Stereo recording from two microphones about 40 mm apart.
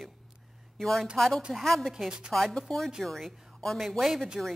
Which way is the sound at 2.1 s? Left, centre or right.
Right.